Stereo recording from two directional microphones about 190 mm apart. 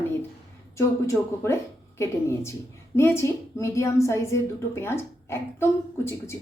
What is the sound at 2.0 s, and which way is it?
A woman's voice, 15° left (ahead or behind).